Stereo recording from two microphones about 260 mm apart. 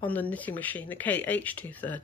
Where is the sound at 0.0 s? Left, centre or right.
Centre.